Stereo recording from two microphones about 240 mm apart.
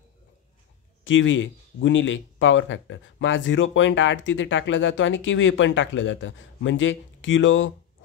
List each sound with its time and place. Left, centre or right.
1.0 s speech: left